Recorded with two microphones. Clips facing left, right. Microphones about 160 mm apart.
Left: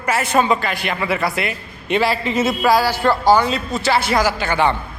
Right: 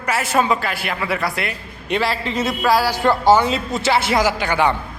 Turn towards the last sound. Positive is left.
turn(degrees=-15)  # may be behind; listen again after turning